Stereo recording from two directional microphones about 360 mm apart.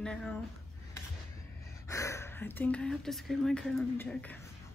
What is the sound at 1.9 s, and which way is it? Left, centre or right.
Speech, centre.